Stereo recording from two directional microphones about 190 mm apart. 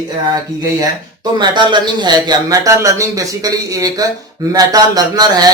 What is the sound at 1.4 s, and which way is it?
A man's voice, 25° right (ahead or behind).